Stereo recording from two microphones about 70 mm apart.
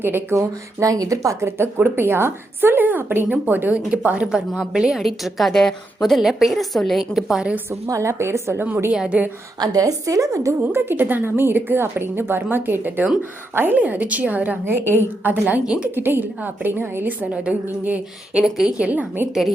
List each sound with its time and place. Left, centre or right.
0.0 s speech: right
0.3 s a woman's voice: right; by 7.4 s centre
7.9 s speech: right
8.9 s speech: centre
9.6 s a woman's voice: right
10.6 s a woman's voice: right
13.7 s a woman's voice: right
14.6 s a woman's voice: right; by 15.9 s centre
16.0 s a woman's voice: right
17.3 s a woman's voice: centre
18.4 s speech: centre
18.8 s a woman's voice: right